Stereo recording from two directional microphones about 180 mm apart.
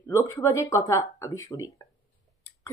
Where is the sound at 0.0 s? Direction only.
15° left (ahead or behind).